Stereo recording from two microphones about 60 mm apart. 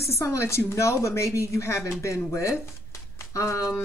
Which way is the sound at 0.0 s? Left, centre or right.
Left.